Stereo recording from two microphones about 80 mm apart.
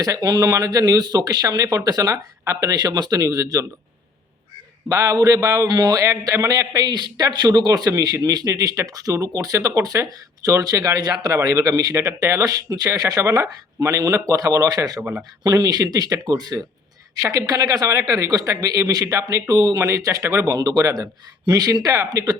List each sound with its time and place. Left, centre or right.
0.0 s a man's voice: right
2.1 s speech: right
2.6 s a man's voice: right
4.9 s a man's voice: right
11.9 s a man's voice: right
17.2 s a man's voice: right